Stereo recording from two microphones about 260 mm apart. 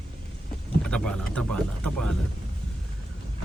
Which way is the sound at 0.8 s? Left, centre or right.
Centre.